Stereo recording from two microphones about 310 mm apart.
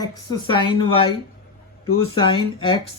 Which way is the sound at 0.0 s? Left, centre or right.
Centre.